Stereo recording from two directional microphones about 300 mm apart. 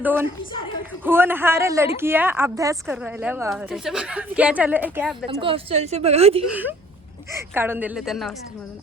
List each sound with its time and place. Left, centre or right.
0.0 s a woman's voice: centre
5.4 s a woman's voice: centre
6.5 s a woman's voice: centre